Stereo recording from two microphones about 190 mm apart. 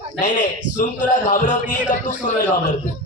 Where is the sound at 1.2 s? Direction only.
40° left (ahead or behind).